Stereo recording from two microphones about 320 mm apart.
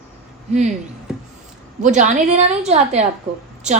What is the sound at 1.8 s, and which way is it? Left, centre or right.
A woman's voice, right.